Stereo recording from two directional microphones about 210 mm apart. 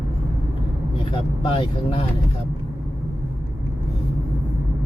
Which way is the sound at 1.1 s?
25° left (ahead or behind).